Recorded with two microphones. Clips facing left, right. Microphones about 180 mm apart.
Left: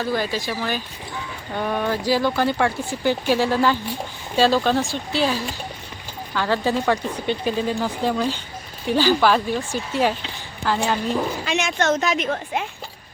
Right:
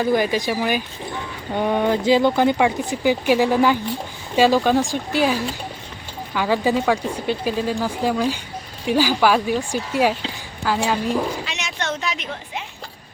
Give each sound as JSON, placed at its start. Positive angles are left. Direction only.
{"t": 0.0, "sound": "a woman's voice", "side_deg": -15}
{"t": 11.4, "sound": "a woman's voice", "side_deg": 50}